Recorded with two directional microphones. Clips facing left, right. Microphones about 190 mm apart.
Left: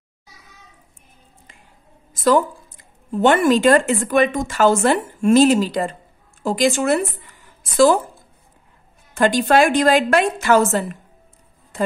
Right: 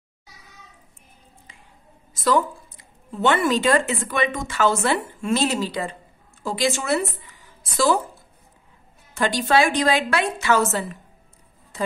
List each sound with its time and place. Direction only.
3.2 s a woman's voice: 45° left (ahead or behind)
9.1 s a woman's voice: 50° left (ahead or behind)